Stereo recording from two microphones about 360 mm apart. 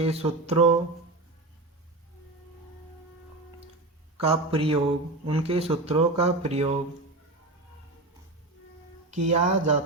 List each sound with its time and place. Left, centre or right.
0.0 s speech: centre
4.2 s speech: centre
9.0 s speech: centre